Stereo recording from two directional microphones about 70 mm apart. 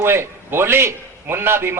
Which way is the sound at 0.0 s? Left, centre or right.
Right.